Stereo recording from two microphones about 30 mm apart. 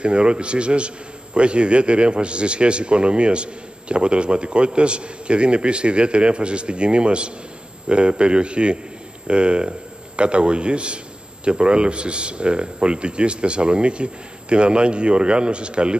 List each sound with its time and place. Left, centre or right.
0.0 s a man's voice: right